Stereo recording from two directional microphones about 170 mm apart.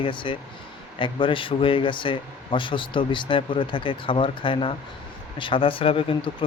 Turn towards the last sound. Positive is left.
turn(degrees=30)  # may be behind; listen again after turning